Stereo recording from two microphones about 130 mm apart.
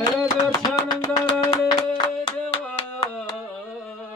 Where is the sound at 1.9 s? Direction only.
40° left (ahead or behind).